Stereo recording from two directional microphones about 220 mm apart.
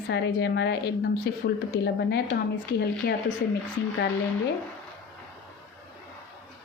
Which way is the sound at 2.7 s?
45° left (ahead or behind).